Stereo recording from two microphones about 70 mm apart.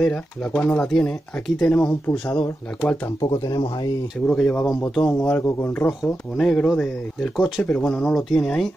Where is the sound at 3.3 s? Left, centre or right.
Left.